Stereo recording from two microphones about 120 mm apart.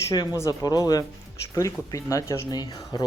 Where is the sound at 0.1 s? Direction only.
35° left (ahead or behind).